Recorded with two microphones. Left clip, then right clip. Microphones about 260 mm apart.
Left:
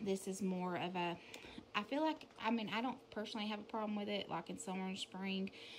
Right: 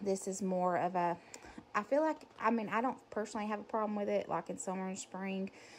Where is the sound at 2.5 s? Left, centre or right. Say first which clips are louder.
Right 3 dB; centre.